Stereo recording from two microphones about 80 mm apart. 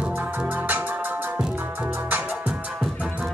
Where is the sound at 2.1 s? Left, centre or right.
Right.